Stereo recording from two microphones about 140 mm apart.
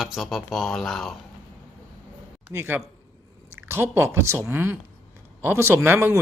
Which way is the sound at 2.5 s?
15° right (ahead or behind).